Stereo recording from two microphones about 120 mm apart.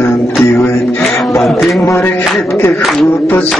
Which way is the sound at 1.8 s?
25° left (ahead or behind).